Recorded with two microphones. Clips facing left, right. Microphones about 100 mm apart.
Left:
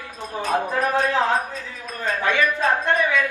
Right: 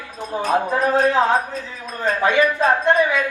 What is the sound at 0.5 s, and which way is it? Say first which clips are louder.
A woman's voice: right 3 dB; 20° right (ahead or behind).